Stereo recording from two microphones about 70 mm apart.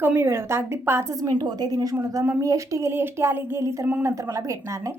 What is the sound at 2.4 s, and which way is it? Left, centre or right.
A woman's voice, right.